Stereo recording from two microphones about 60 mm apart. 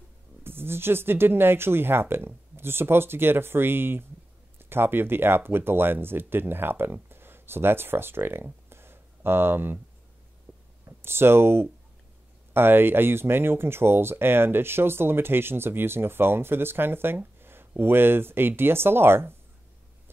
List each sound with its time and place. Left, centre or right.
0.4 s speech: right
10.9 s speech: right